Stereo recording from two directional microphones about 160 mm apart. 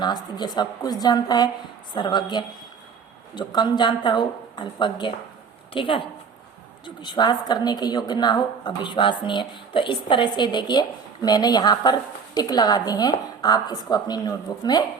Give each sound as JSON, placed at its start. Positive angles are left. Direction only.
{"t": 0.0, "sound": "a woman's voice", "side_deg": 25}